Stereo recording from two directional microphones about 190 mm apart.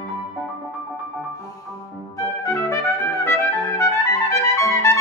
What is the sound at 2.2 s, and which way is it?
Trumpet, 15° left (ahead or behind).